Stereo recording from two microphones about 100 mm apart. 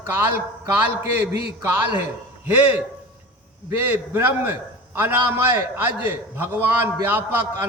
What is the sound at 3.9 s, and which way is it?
A man's voice, 20° right (ahead or behind).